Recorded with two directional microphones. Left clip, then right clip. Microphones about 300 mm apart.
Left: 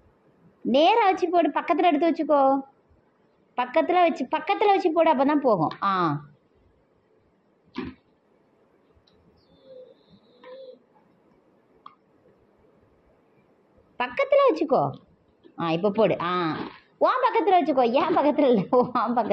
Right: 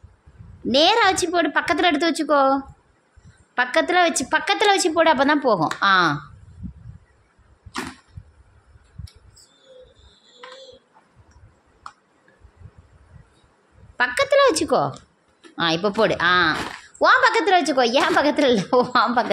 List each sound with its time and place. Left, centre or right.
0.7 s a woman's voice: centre
13.9 s a woman's voice: centre